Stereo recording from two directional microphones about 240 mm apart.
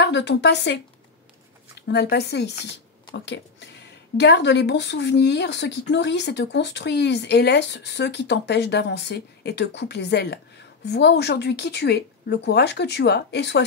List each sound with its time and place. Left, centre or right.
0.0 s speech: left
1.8 s speech: left